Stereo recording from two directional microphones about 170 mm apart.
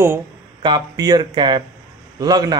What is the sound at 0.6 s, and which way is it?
Speech, 25° right (ahead or behind).